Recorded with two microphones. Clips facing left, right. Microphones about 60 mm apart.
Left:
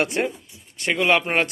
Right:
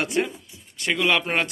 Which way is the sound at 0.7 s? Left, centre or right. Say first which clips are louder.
Left 2 dB; left.